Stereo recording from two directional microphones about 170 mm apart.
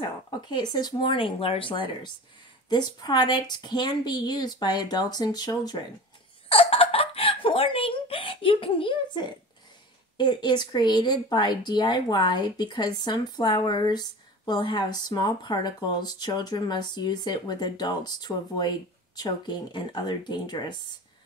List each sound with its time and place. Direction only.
0.5 s speech: 25° left (ahead or behind)
6.5 s a sound: 35° left (ahead or behind)
10.1 s speech: 25° left (ahead or behind)